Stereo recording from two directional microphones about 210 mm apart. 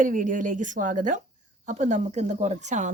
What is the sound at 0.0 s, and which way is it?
A woman's voice, 40° right (ahead or behind).